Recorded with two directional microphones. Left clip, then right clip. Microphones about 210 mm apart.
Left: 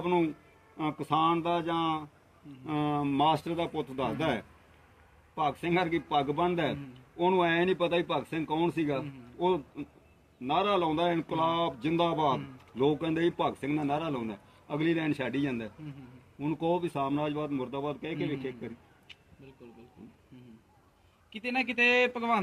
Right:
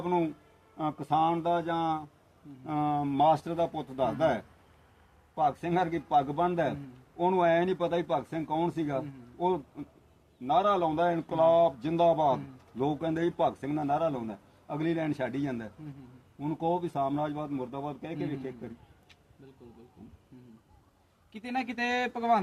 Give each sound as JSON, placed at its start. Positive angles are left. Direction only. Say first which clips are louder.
{"t": 0.0, "sound": "speech", "louder": "left 1 dB", "side_deg": -10}
{"t": 21.3, "sound": "speech", "louder": "left 4 dB", "side_deg": 5}